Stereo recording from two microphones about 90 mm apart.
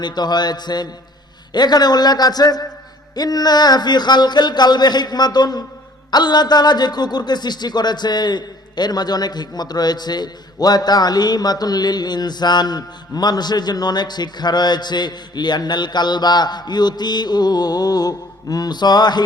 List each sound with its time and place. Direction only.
0.0 s a man's voice: 50° left (ahead or behind)